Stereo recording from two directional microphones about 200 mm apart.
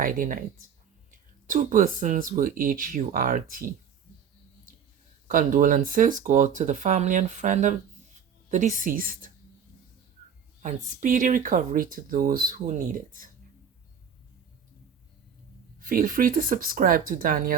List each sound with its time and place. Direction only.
0.0 s speech: 45° right (ahead or behind)
1.5 s speech: 45° right (ahead or behind)
5.3 s speech: 40° right (ahead or behind)
10.6 s speech: 40° right (ahead or behind)
15.8 s speech: 45° right (ahead or behind)